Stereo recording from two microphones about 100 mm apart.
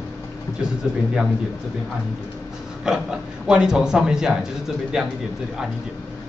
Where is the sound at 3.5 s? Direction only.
10° right (ahead or behind).